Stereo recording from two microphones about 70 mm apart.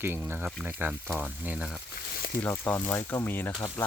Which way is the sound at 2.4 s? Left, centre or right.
Left.